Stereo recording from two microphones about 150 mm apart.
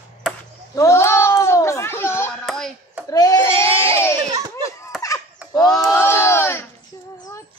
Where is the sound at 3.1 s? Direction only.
25° left (ahead or behind).